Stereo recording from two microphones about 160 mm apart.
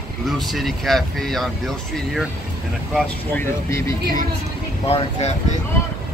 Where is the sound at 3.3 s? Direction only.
20° left (ahead or behind).